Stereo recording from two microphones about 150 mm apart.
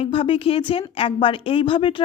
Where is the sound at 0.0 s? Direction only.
35° left (ahead or behind).